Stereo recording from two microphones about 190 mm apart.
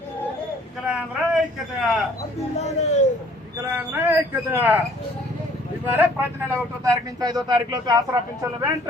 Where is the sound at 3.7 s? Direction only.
10° right (ahead or behind).